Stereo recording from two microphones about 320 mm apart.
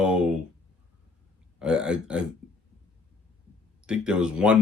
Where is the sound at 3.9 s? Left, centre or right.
Centre.